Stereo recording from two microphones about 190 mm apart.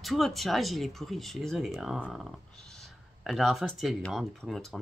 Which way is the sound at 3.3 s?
Centre (ahead or behind).